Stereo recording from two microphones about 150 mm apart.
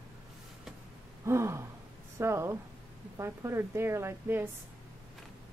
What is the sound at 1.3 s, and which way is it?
Speech, 20° right (ahead or behind).